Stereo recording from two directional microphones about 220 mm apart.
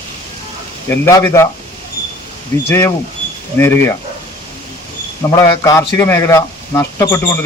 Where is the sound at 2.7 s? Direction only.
10° left (ahead or behind).